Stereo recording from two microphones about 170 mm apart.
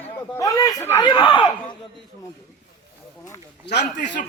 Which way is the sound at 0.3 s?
20° left (ahead or behind).